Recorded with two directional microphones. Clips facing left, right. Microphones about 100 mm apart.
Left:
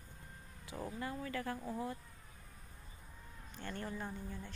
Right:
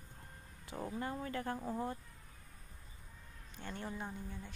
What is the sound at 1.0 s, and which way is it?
Speech, 35° right (ahead or behind).